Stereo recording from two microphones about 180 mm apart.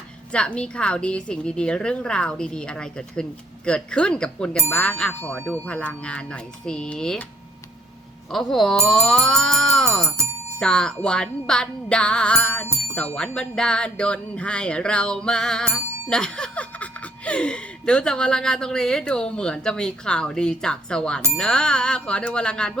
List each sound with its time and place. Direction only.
0.3 s speech: 5° left (ahead or behind)
8.3 s speech: centre (ahead or behind)
12.6 s music: 15° right (ahead or behind)
13.1 s speech: 5° left (ahead or behind)